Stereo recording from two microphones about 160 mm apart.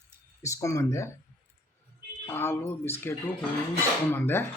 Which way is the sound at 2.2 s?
15° left (ahead or behind).